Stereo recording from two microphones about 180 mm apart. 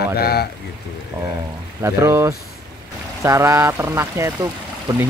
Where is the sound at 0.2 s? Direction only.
60° left (ahead or behind).